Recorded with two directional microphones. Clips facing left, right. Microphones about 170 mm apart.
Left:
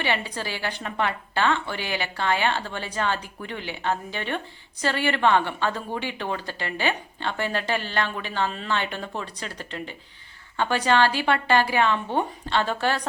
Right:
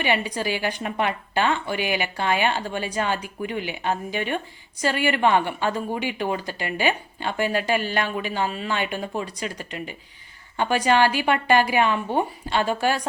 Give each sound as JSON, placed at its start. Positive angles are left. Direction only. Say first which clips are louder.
{"t": 0.0, "sound": "a woman's voice", "louder": "right 4 dB", "side_deg": -15}